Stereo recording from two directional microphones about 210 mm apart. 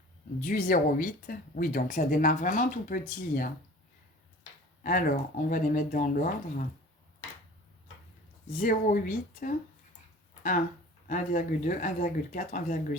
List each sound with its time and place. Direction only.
0.4 s speech: 40° left (ahead or behind)
4.8 s speech: 40° left (ahead or behind)
8.5 s speech: 40° left (ahead or behind)
11.1 s speech: 40° left (ahead or behind)